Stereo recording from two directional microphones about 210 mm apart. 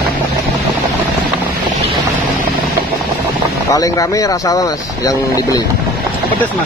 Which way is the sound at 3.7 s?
15° left (ahead or behind).